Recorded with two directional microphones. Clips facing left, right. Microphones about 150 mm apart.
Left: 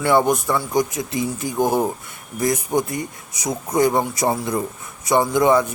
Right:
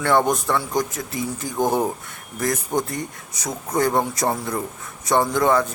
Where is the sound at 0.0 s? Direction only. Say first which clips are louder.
Left 2 dB; 10° left (ahead or behind).